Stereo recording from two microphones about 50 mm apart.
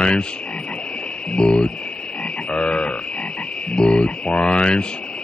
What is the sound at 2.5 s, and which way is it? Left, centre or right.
Frog, centre.